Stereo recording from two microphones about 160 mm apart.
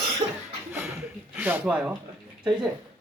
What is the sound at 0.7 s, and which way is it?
Speech, 15° right (ahead or behind).